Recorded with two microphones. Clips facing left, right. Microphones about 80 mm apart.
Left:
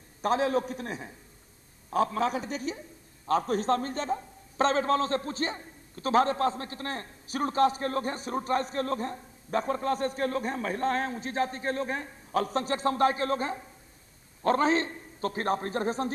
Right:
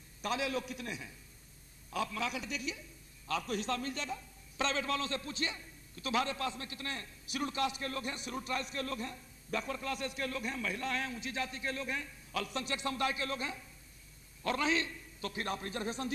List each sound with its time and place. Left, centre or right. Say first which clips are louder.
0.2 s a man's voice: left 9 dB; left